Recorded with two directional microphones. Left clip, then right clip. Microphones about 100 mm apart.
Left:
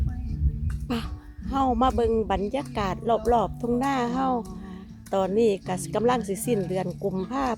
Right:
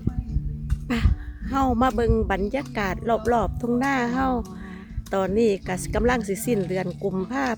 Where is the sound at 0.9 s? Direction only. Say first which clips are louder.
Right 4 dB; 30° right (ahead or behind).